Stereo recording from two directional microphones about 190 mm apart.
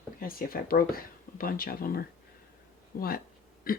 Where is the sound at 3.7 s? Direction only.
50° left (ahead or behind).